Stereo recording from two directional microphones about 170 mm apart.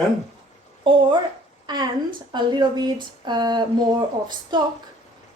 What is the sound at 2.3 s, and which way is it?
A woman's voice, 25° right (ahead or behind).